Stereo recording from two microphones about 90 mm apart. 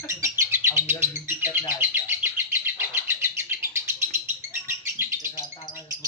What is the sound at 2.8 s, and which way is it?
Bird, 25° right (ahead or behind).